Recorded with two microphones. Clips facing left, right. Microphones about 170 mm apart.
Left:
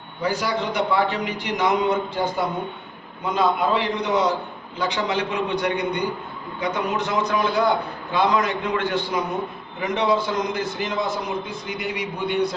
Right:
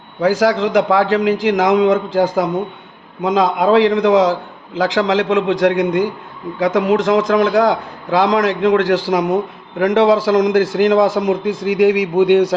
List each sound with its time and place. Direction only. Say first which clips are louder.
0.2 s a man's voice: right 10 dB; 90° right